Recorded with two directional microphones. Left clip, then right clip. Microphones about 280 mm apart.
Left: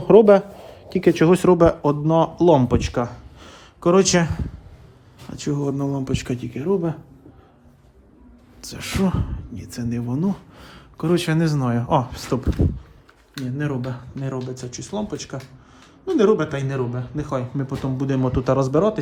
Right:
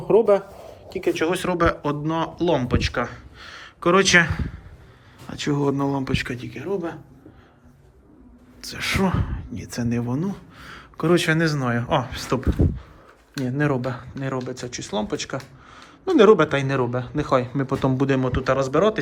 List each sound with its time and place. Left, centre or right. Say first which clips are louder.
0.1 s speech: left 5 dB; left
9.0 s speech: right 1 dB; centre
13.4 s speech: right 4 dB; centre